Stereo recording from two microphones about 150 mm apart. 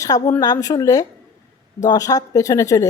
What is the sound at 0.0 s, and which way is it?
Speech, 20° left (ahead or behind).